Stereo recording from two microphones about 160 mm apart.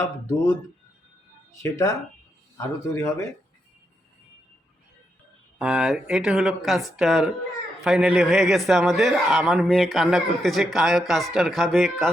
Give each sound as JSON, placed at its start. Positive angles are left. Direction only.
{"t": 0.0, "sound": "speech", "side_deg": 20}
{"t": 1.6, "sound": "speech", "side_deg": 20}
{"t": 5.5, "sound": "a man's voice", "side_deg": -5}